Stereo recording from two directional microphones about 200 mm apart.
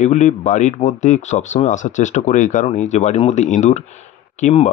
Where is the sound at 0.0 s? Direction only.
35° left (ahead or behind).